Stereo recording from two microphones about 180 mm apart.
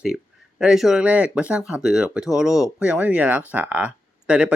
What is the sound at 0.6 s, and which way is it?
Speech, 5° right (ahead or behind).